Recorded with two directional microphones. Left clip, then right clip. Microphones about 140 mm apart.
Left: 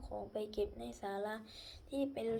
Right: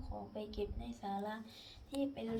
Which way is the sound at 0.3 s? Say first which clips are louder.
Left 4 dB; 40° left (ahead or behind).